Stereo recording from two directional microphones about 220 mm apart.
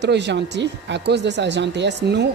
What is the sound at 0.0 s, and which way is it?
A woman's voice, 50° right (ahead or behind).